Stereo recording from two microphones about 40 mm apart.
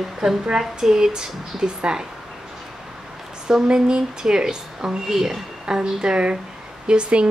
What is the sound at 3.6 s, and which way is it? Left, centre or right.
A woman's voice, right.